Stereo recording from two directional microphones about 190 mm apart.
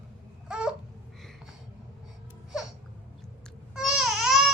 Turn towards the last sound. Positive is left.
turn(degrees=0)  # may be behind; listen again after turning